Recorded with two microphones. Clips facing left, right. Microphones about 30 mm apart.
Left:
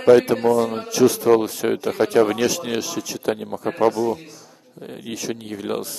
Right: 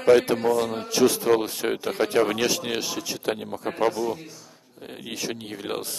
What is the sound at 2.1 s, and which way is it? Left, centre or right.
Speech, centre.